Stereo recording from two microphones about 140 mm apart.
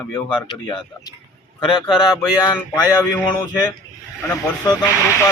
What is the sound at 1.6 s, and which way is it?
Speech, 35° left (ahead or behind).